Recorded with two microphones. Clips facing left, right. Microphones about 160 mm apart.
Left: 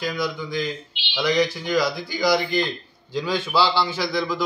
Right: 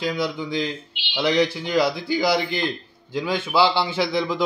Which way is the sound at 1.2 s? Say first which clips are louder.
Right 1 dB; 25° right (ahead or behind).